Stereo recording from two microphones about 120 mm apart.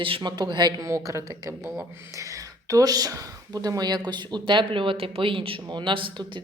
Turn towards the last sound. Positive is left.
turn(degrees=-45)  # may be behind; listen again after turning